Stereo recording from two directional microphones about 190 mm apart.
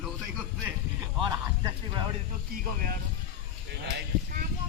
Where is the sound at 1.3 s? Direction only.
20° right (ahead or behind).